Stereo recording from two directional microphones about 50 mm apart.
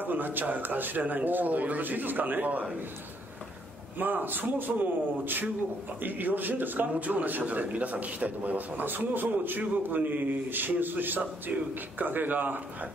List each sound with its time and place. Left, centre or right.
0.0 s a man's voice: right
4.0 s a man's voice: right